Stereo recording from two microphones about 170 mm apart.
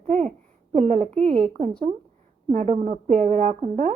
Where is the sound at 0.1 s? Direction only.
45° right (ahead or behind).